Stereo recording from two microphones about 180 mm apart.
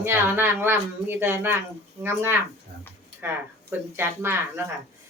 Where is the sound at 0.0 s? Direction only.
10° right (ahead or behind).